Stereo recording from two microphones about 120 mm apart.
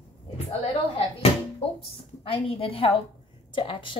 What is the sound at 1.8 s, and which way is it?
A woman's voice, 50° left (ahead or behind).